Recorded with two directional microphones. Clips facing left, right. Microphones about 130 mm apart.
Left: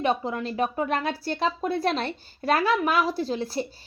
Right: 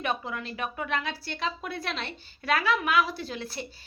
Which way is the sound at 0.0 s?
35° left (ahead or behind).